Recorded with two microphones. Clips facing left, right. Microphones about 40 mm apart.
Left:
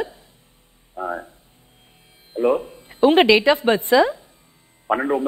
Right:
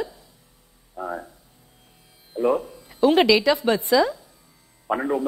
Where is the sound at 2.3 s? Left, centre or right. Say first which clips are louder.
Left 2 dB; left.